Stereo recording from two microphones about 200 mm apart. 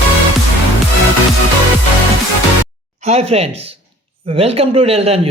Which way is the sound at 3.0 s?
30° right (ahead or behind).